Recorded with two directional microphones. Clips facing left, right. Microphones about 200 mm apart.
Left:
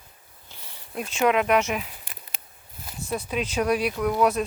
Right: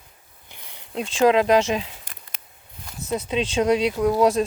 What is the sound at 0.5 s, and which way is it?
Speech, 25° right (ahead or behind).